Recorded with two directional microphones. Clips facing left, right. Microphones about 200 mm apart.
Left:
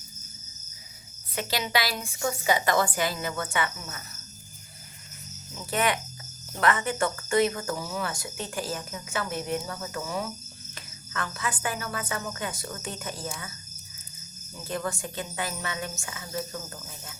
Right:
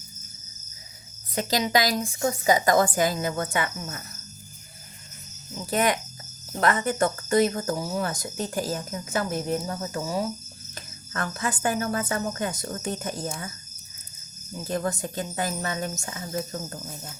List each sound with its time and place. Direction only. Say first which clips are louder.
1.4 s speech: right 5 dB; 40° right (ahead or behind)
5.7 s speech: right 3 dB; 40° right (ahead or behind)
10.8 s cricket: right 3 dB; 45° right (ahead or behind)
11.6 s a sound: right 7 dB; 45° right (ahead or behind)
12.6 s speech: right 5 dB; 40° right (ahead or behind)
14.7 s speech: right 4 dB; 40° right (ahead or behind)